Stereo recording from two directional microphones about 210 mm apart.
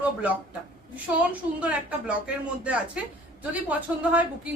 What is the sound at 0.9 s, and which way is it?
A woman's voice, 5° right (ahead or behind).